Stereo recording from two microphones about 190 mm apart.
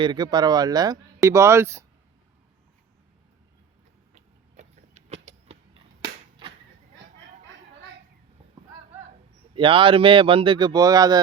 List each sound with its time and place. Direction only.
0.0 s speech: 20° right (ahead or behind)
4.1 s vehicle: 35° right (ahead or behind)
6.0 s a sound: 25° right (ahead or behind)
9.6 s speech: 25° right (ahead or behind)